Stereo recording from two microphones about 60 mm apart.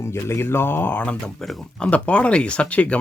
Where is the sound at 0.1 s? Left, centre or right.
Left.